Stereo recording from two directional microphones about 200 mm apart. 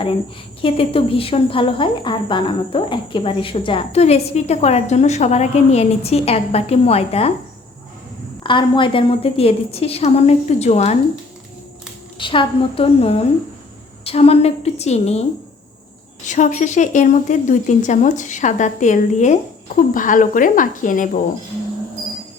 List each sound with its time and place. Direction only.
0.6 s speech: 25° left (ahead or behind)
8.4 s speech: 25° left (ahead or behind)
12.1 s a woman's voice: 25° left (ahead or behind); by 21.2 s 40° left (ahead or behind)